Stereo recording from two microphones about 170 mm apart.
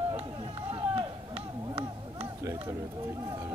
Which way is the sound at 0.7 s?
35° right (ahead or behind).